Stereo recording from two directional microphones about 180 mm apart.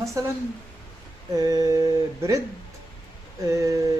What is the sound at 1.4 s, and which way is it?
Speech, 20° right (ahead or behind).